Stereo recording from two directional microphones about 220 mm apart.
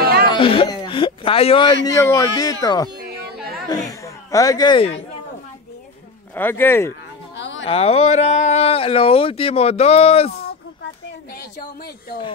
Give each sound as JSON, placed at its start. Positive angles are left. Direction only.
{"t": 0.0, "sound": "a sound", "side_deg": -45}
{"t": 0.3, "sound": "a man's voice", "side_deg": 25}
{"t": 2.0, "sound": "speech", "side_deg": 15}
{"t": 6.3, "sound": "speech", "side_deg": 10}
{"t": 7.3, "sound": "a sound", "side_deg": 55}
{"t": 7.6, "sound": "speech", "side_deg": 25}